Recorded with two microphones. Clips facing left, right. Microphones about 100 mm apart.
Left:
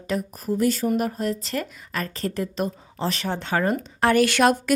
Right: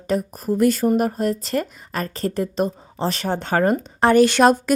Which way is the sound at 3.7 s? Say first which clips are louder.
Right 5 dB; 25° right (ahead or behind).